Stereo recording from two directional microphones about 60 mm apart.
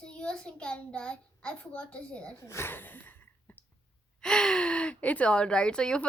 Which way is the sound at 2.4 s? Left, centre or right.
Left.